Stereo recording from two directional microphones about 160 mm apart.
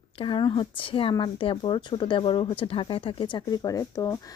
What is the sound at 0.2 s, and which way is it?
A woman's voice, 30° left (ahead or behind).